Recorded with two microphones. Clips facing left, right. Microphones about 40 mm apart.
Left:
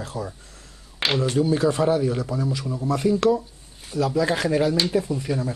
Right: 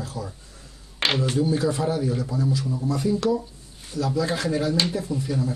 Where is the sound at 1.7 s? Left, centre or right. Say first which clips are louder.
Left 4 dB; left.